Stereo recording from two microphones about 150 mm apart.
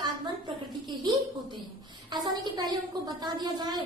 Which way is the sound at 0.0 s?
30° right (ahead or behind).